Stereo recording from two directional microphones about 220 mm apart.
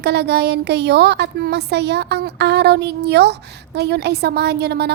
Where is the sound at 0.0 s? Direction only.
50° right (ahead or behind).